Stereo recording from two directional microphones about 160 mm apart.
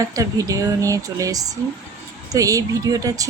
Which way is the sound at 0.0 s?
20° right (ahead or behind).